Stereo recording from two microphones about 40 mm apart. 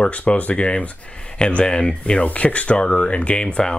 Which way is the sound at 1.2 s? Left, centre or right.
Left.